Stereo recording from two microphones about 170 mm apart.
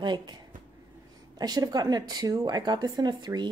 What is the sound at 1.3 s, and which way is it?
A woman's voice, 25° right (ahead or behind).